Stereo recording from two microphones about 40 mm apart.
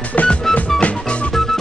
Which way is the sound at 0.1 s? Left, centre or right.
Left.